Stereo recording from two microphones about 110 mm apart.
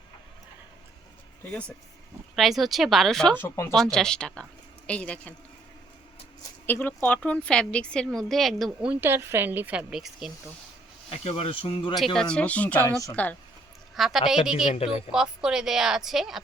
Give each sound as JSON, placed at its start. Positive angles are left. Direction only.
{"t": 2.3, "sound": "a woman's voice", "side_deg": 0}
{"t": 3.3, "sound": "speech", "side_deg": 20}
{"t": 3.8, "sound": "a woman's voice", "side_deg": 5}
{"t": 6.7, "sound": "a woman's voice", "side_deg": 20}
{"t": 8.9, "sound": "a woman's voice", "side_deg": -20}
{"t": 9.9, "sound": "a woman's voice", "side_deg": 0}
{"t": 11.1, "sound": "speech", "side_deg": 65}
{"t": 12.1, "sound": "a woman's voice", "side_deg": 5}
{"t": 13.9, "sound": "a woman's voice", "side_deg": 0}